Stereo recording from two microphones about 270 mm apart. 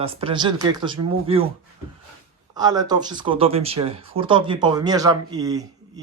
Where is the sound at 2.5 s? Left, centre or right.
Centre.